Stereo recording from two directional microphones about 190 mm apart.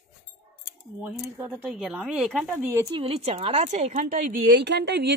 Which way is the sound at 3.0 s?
30° right (ahead or behind).